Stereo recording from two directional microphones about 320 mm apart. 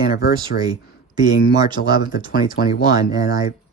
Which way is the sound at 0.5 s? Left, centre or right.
Left.